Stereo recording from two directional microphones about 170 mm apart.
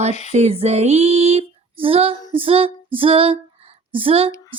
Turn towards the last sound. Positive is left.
turn(degrees=-35)  # may be behind; listen again after turning